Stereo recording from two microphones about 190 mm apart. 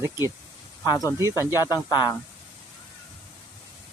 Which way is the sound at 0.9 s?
20° left (ahead or behind).